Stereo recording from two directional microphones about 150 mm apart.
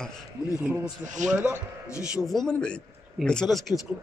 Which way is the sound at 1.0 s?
55° right (ahead or behind).